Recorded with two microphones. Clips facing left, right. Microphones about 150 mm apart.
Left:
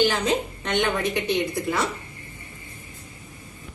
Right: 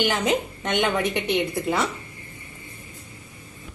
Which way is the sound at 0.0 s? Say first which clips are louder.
Left 1 dB; 15° right (ahead or behind).